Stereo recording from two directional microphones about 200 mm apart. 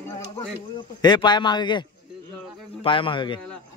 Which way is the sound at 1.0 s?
20° left (ahead or behind).